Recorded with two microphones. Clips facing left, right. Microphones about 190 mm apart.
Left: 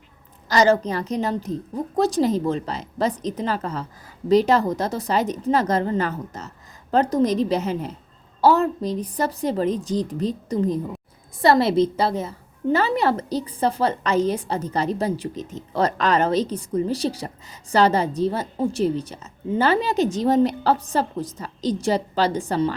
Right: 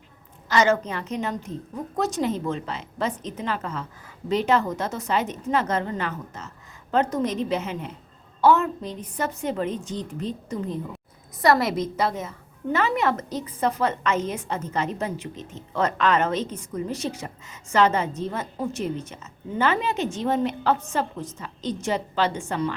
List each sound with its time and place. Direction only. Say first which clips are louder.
0.4 s a woman's voice: left 3 dB; 35° left (ahead or behind)